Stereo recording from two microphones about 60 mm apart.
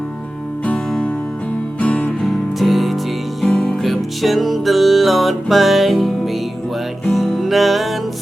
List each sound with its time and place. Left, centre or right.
0.6 s music: left
2.2 s music: centre
3.4 s music: centre
3.8 s music: centre